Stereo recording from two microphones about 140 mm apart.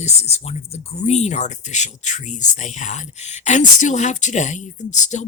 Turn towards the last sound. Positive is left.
turn(degrees=60)  # may be behind; listen again after turning